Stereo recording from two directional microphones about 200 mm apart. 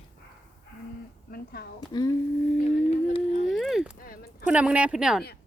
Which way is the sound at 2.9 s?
35° left (ahead or behind).